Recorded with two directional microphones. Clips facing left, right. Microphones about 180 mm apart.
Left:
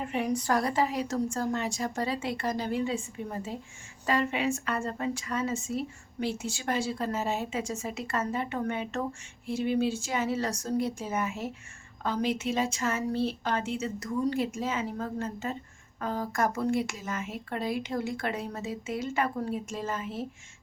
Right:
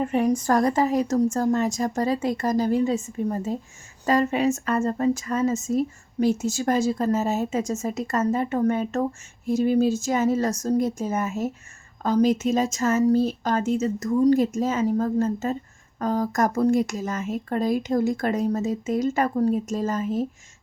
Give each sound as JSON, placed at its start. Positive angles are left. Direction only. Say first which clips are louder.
{"t": 0.0, "sound": "a woman's voice", "louder": "right 8 dB", "side_deg": -45}